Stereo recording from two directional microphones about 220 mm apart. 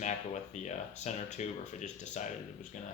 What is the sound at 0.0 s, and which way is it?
Speech, 30° left (ahead or behind).